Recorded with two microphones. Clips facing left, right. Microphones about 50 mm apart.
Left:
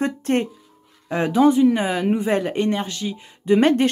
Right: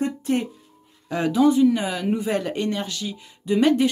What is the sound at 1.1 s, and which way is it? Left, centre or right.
Speech, left.